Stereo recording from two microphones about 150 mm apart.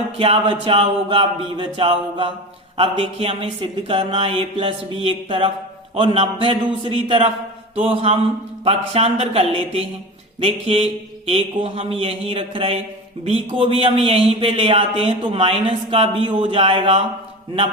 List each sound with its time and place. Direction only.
0.2 s speech: 35° right (ahead or behind)